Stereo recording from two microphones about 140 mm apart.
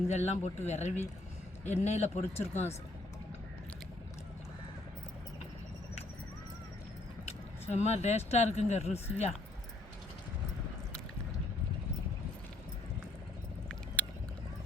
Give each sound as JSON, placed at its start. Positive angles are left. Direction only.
{"t": 0.1, "sound": "speech", "side_deg": 50}
{"t": 7.7, "sound": "speech", "side_deg": 50}
{"t": 14.0, "sound": "vehicle", "side_deg": 10}